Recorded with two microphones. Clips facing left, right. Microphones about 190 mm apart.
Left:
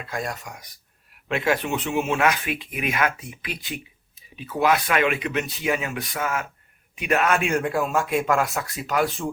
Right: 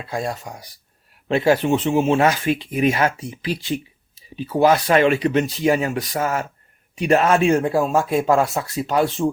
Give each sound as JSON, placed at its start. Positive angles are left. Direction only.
{"t": 0.0, "sound": "speech", "side_deg": -30}